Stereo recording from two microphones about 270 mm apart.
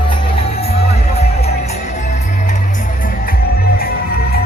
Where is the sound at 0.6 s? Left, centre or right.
Left.